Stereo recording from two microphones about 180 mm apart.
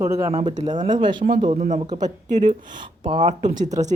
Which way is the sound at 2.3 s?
45° right (ahead or behind).